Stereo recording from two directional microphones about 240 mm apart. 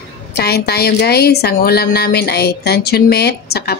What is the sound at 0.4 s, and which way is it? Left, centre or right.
A woman's voice, left.